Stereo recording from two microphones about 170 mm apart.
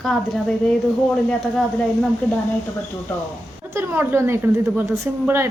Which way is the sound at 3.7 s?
15° right (ahead or behind).